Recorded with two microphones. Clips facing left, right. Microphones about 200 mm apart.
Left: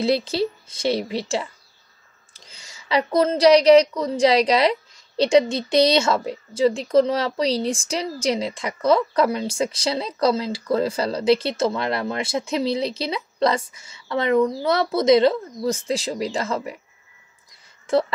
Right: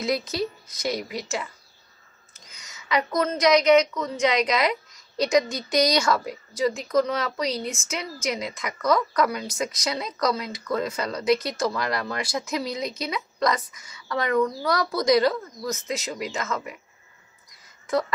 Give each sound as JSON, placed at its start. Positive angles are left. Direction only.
{"t": 0.0, "sound": "a woman's voice", "side_deg": 30}